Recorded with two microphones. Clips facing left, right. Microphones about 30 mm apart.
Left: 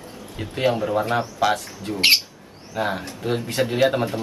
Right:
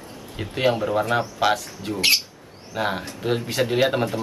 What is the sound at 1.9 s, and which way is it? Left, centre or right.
Speech, centre.